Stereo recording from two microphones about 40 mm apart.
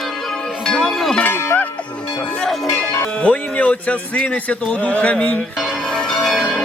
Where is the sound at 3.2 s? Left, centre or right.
Left.